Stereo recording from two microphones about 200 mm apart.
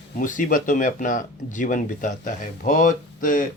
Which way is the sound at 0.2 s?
40° left (ahead or behind).